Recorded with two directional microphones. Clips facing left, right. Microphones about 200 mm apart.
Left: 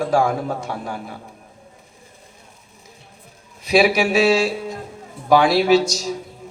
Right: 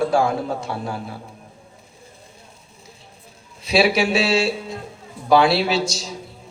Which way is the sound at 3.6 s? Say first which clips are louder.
Left 2 dB; 30° right (ahead or behind).